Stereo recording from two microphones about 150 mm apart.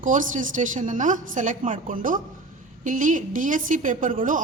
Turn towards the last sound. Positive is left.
turn(degrees=-60)  # may be behind; listen again after turning